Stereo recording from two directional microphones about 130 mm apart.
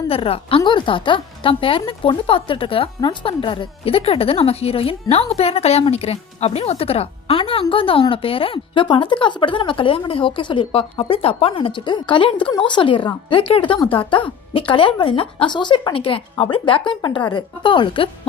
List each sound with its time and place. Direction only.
0.1 s a woman's voice: 45° left (ahead or behind)